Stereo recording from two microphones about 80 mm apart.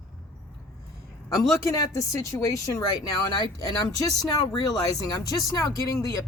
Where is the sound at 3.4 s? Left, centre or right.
Left.